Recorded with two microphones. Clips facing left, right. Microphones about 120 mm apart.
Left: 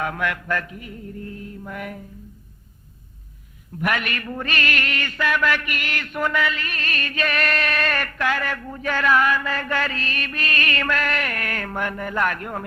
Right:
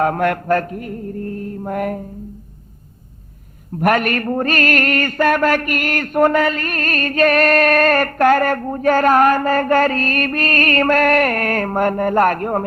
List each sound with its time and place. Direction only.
0.0 s mantra: 45° right (ahead or behind)
3.8 s mantra: 45° right (ahead or behind)